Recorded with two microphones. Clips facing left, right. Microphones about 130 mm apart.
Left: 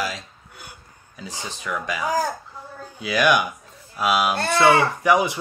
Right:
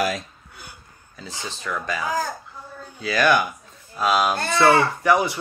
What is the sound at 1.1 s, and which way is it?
Speech, 15° left (ahead or behind).